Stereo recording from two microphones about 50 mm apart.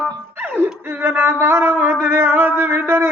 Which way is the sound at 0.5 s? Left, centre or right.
Right.